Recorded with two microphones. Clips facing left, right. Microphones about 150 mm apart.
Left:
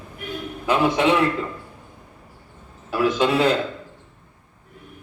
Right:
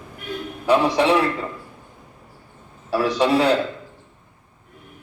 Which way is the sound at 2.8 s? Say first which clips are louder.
Even; 35° right (ahead or behind).